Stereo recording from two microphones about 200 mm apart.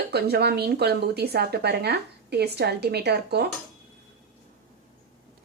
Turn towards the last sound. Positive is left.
turn(degrees=-55)  # may be behind; listen again after turning